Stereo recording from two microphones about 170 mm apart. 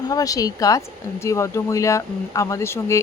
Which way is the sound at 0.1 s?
20° left (ahead or behind).